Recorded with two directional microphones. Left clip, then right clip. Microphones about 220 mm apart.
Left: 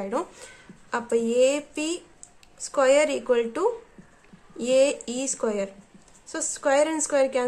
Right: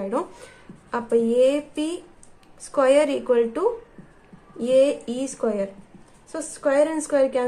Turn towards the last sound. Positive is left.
turn(degrees=15)  # may be behind; listen again after turning